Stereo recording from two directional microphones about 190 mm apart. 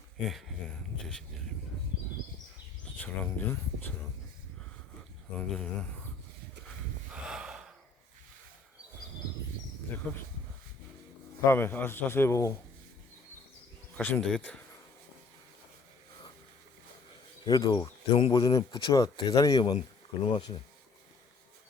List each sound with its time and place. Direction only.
0.3 s speech: centre (ahead or behind)
2.8 s speech: 10° left (ahead or behind)
5.4 s speech: 5° left (ahead or behind)
7.1 s gasp: 5° right (ahead or behind)
10.0 s a man's voice: 5° left (ahead or behind)
11.4 s a man's voice: 10° left (ahead or behind)
13.9 s speech: 10° left (ahead or behind)
17.4 s speech: 20° left (ahead or behind)